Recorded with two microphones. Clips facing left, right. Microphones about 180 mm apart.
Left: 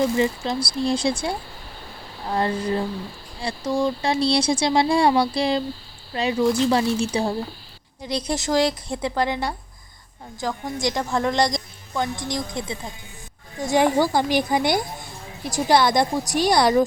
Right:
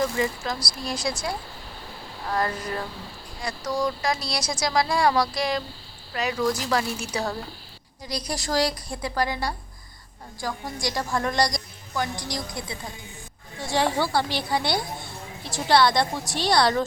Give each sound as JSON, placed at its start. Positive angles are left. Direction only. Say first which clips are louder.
{"t": 0.0, "sound": "a woman's voice", "louder": "left 5 dB", "side_deg": 25}